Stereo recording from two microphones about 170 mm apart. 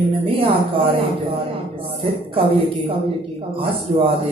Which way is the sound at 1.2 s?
30° right (ahead or behind).